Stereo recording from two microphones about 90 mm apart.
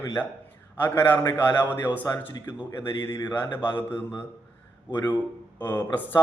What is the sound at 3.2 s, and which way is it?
Speech, 55° left (ahead or behind).